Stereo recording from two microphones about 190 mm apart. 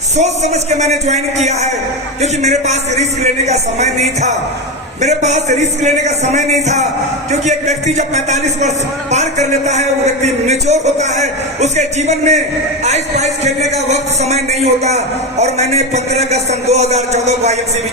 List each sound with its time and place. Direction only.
0.2 s a man's voice: 35° right (ahead or behind)